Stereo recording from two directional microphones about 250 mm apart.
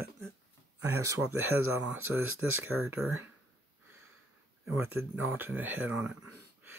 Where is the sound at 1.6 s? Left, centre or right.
Right.